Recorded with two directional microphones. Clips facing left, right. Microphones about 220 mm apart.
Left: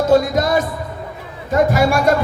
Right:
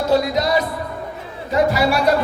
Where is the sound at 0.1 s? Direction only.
50° left (ahead or behind).